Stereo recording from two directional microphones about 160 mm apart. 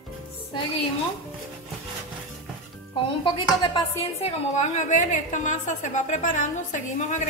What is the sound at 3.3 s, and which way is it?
A woman's voice, 30° left (ahead or behind).